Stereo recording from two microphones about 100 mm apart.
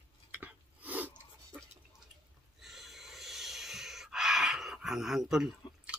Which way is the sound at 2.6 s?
Centre (ahead or behind).